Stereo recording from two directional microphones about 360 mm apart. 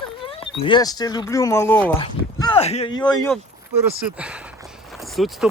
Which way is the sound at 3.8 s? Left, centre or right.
Centre.